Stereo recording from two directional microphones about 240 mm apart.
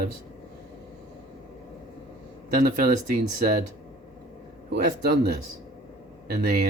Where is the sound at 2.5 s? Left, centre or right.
Right.